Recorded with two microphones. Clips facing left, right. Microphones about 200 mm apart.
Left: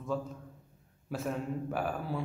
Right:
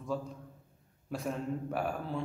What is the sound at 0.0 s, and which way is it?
A man's voice, centre (ahead or behind).